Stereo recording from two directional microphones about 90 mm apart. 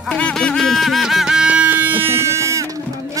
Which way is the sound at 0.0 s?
10° left (ahead or behind).